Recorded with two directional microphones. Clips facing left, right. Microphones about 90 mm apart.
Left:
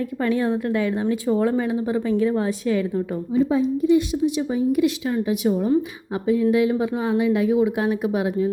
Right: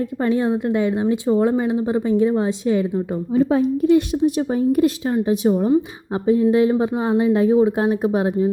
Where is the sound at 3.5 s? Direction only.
55° right (ahead or behind).